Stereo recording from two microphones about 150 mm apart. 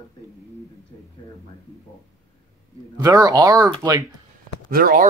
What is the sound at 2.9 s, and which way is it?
Speech, 25° right (ahead or behind).